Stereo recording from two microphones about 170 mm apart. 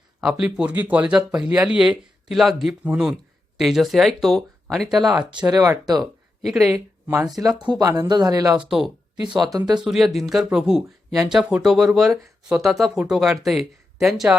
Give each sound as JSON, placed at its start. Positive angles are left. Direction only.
{"t": 0.2, "sound": "speech", "side_deg": -5}
{"t": 5.5, "sound": "speech", "side_deg": -20}
{"t": 6.4, "sound": "speech", "side_deg": 0}
{"t": 6.7, "sound": "speech", "side_deg": -15}
{"t": 9.7, "sound": "speech", "side_deg": -5}